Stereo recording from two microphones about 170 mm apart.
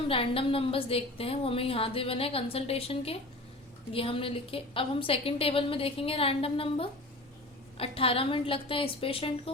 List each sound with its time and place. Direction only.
0.1 s a woman's voice: 35° left (ahead or behind)